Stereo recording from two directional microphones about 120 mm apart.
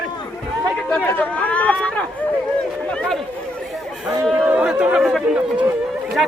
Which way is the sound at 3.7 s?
Centre (ahead or behind).